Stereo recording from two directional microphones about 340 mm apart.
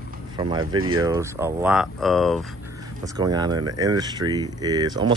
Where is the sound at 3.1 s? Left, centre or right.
Centre.